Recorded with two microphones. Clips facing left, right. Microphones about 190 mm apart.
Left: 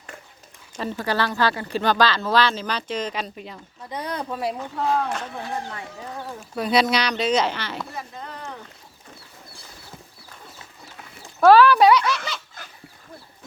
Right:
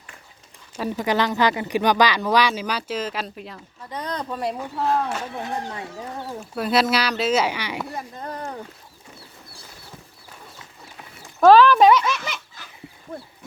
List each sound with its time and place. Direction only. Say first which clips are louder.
0.8 s speech: right 2 dB; 15° right (ahead or behind); by 3.6 s centre (ahead or behind)
3.8 s speech: even; 10° left (ahead or behind)
5.4 s speech: right 2 dB; 20° right (ahead or behind)
6.5 s speech: even; centre (ahead or behind)
8.2 s speech: right 5 dB; 50° right (ahead or behind)
11.3 s speech: right 1 dB; 10° left (ahead or behind)